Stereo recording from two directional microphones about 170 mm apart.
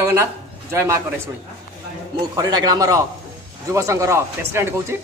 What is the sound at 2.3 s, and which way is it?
A man's voice, 20° right (ahead or behind).